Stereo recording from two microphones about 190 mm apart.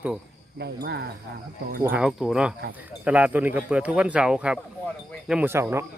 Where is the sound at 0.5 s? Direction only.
60° right (ahead or behind).